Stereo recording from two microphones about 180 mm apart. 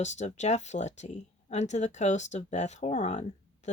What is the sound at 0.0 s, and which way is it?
Speech, 40° left (ahead or behind).